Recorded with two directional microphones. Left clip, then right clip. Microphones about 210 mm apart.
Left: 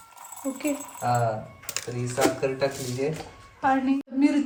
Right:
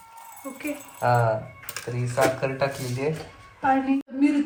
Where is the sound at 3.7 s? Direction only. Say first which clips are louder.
Right 3 dB; 5° left (ahead or behind).